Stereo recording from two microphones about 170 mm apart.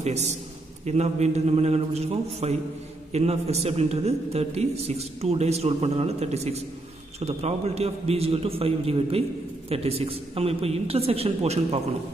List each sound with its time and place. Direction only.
0.0 s a man's voice: 40° right (ahead or behind)